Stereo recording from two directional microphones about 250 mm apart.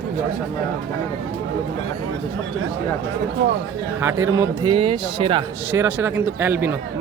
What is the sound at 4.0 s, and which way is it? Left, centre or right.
Speech, centre.